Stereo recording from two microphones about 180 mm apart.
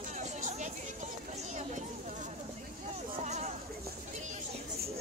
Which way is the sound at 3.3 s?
40° right (ahead or behind).